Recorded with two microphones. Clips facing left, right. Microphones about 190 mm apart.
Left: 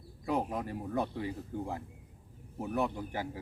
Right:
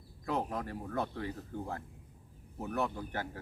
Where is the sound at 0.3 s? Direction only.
15° left (ahead or behind).